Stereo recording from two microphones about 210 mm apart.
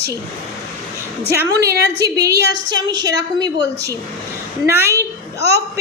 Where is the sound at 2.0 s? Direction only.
15° right (ahead or behind).